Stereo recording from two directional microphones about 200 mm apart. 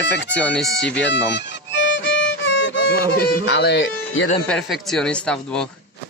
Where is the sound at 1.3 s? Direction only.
60° left (ahead or behind).